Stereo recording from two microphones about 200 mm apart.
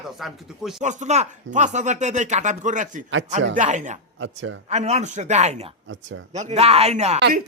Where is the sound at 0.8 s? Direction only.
35° right (ahead or behind).